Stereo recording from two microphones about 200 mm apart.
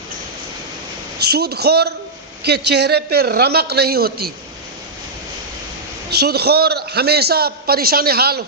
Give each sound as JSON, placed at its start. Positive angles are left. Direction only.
{"t": 1.2, "sound": "a man's voice", "side_deg": -55}
{"t": 6.1, "sound": "a man's voice", "side_deg": -55}